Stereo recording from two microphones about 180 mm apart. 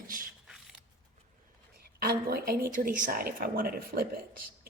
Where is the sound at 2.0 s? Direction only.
60° right (ahead or behind).